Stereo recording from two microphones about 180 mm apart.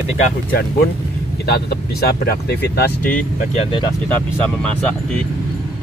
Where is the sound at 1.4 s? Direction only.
60° left (ahead or behind).